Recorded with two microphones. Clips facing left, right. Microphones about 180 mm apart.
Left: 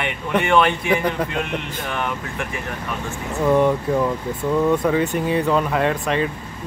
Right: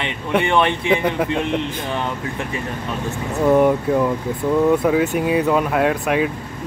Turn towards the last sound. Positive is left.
turn(degrees=-5)  # may be behind; listen again after turning